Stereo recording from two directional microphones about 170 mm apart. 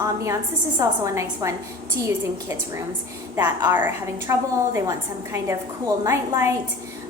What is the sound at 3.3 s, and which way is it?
A woman's voice, 15° right (ahead or behind).